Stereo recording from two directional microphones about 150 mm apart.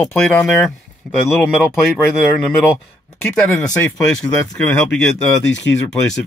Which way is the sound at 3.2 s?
10° left (ahead or behind).